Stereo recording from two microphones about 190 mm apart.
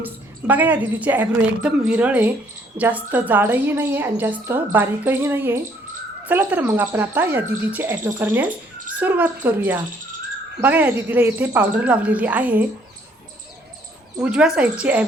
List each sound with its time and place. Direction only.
0.0 s a woman's voice: 10° right (ahead or behind)
14.2 s speech: 5° right (ahead or behind)